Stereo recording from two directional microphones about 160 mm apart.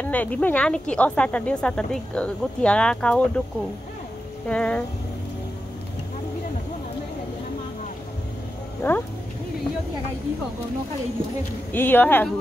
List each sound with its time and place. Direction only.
0.0 s speech: 10° left (ahead or behind)
4.5 s speech: 5° left (ahead or behind)
8.8 s speech: 15° left (ahead or behind)
11.7 s speech: 10° left (ahead or behind)